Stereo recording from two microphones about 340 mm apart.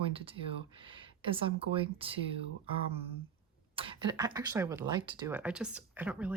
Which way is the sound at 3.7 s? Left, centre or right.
Centre.